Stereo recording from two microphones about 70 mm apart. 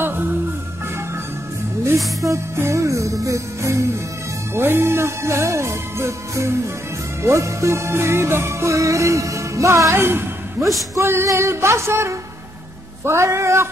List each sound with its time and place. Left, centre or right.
2.2 s music: right
4.6 s music: right